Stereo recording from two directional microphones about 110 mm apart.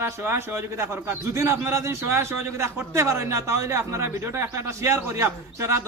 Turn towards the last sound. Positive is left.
turn(degrees=-25)  # may be behind; listen again after turning